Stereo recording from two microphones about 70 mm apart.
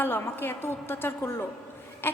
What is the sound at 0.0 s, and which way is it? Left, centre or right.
A woman's voice, left.